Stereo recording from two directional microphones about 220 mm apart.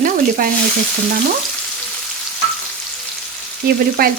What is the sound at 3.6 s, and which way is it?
Frying, 45° right (ahead or behind).